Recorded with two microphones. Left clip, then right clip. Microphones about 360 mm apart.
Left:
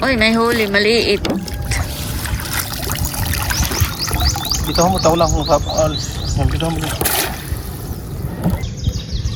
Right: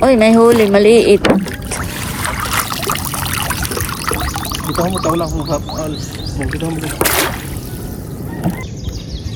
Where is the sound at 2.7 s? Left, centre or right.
Centre.